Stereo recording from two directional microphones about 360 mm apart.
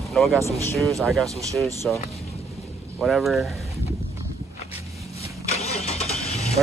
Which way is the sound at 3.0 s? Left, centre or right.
Centre.